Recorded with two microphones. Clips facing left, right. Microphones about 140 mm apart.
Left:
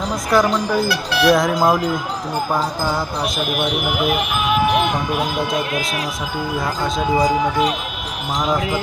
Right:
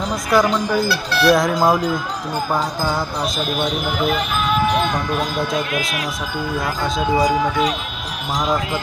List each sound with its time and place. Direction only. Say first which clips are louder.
0.1 s speech: even; centre (ahead or behind)
3.4 s a man's voice: left 1 dB; 10° left (ahead or behind)
6.8 s speech: even; centre (ahead or behind)